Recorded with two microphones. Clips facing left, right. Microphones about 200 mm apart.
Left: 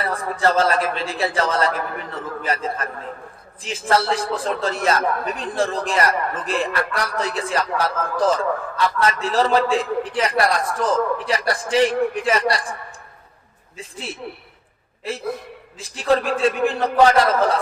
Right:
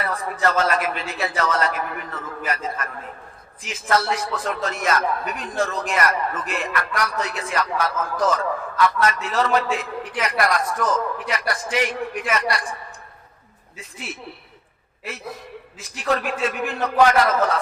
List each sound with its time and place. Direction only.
0.0 s a man's voice: 30° left (ahead or behind)
13.7 s a man's voice: 30° left (ahead or behind)
15.8 s a man's voice: 30° left (ahead or behind)